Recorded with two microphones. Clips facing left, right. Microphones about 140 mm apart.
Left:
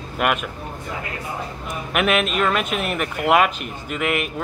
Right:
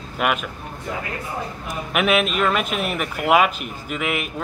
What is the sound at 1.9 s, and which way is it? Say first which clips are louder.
Speech: even; centre (ahead or behind).